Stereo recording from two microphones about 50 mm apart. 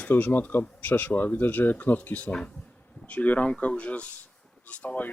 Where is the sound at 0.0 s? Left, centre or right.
Left.